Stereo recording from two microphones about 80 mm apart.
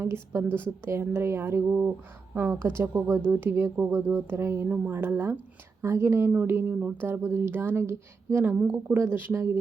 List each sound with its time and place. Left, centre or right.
0.0 s speech: right
1.6 s speech: centre